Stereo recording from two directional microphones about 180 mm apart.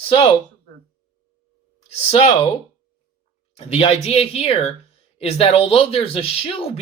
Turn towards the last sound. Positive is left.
turn(degrees=35)  # may be behind; listen again after turning